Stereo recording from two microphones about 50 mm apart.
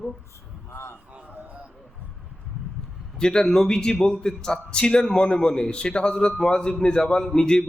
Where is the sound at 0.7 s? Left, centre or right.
Left.